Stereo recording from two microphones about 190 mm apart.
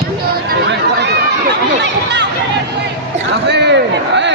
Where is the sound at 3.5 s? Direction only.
65° right (ahead or behind).